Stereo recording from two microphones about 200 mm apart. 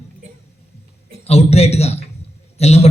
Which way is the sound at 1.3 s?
30° left (ahead or behind).